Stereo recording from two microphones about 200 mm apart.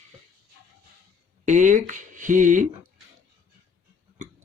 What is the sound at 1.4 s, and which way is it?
Speech, 40° right (ahead or behind).